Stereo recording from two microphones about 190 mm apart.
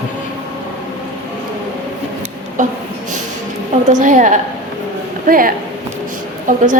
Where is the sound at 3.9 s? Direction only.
40° right (ahead or behind).